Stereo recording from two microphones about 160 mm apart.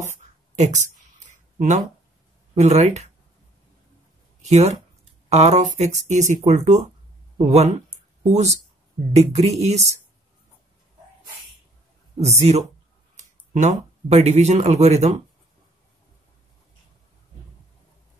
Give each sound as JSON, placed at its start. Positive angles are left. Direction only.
{"t": 0.6, "sound": "speech", "side_deg": -45}
{"t": 2.5, "sound": "speech", "side_deg": -45}
{"t": 4.4, "sound": "speech", "side_deg": -45}
{"t": 12.2, "sound": "speech", "side_deg": -45}